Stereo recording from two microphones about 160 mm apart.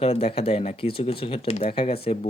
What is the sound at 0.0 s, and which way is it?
Speech, 40° left (ahead or behind).